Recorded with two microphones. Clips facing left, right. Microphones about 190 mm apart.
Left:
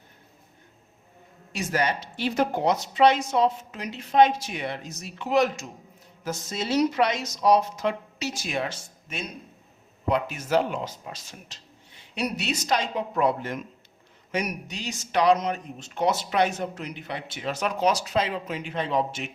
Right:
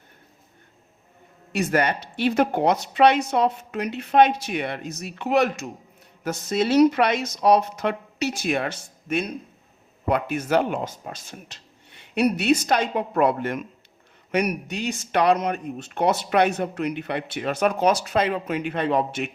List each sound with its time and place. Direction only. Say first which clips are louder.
1.5 s speech: right 4 dB; 60° right (ahead or behind)